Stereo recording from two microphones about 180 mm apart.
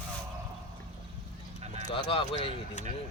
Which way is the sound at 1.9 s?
30° left (ahead or behind).